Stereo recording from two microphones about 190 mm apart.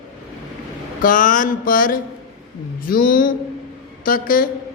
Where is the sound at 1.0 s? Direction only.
45° left (ahead or behind).